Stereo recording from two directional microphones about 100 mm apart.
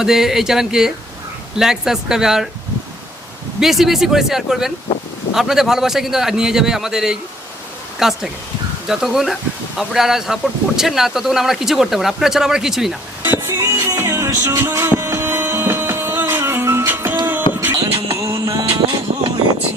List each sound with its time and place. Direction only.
0.0 s speech: 5° right (ahead or behind)
3.6 s speech: 5° right (ahead or behind)
13.5 s music: 35° right (ahead or behind)
17.7 s music: 35° right (ahead or behind)